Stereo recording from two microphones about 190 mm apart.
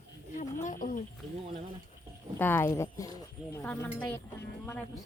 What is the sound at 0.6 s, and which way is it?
Speech, 45° left (ahead or behind).